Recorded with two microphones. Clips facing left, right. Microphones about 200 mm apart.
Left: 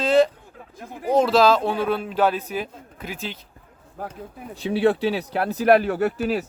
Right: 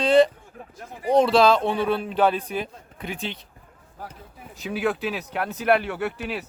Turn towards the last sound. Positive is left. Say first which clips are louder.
# left 6 dB
turn(degrees=40)  # may be behind; listen again after turning